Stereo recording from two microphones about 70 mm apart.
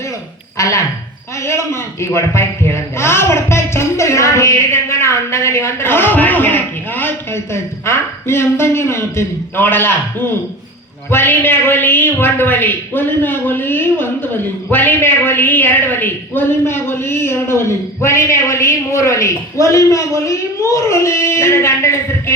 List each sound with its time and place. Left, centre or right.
0.5 s speech: left
1.4 s a man's voice: left
11.1 s a woman's voice: left